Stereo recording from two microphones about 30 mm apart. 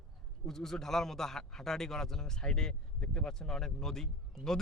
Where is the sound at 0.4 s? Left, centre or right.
Centre.